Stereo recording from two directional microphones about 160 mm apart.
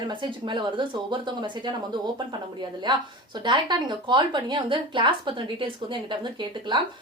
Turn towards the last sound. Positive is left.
turn(degrees=-30)  # may be behind; listen again after turning